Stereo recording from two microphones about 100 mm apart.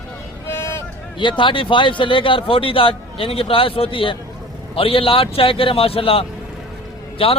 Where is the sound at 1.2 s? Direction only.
55° left (ahead or behind).